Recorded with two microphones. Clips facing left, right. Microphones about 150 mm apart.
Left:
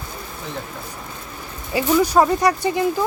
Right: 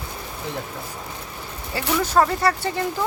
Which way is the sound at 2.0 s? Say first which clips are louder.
Left 1 dB; 15° left (ahead or behind).